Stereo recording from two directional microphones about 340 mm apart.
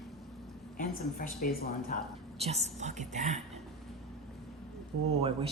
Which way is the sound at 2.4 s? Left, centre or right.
Centre.